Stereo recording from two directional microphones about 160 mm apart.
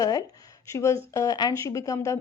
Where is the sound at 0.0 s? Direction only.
25° left (ahead or behind).